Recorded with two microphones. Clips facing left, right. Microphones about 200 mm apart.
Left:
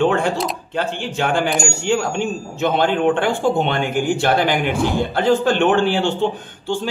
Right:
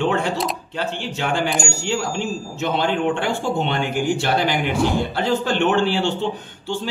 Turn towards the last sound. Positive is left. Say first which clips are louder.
# left 2 dB
turn(degrees=50)  # may be behind; listen again after turning